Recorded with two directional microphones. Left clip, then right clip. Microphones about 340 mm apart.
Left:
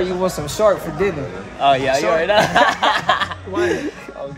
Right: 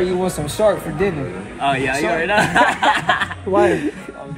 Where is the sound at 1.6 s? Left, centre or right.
Left.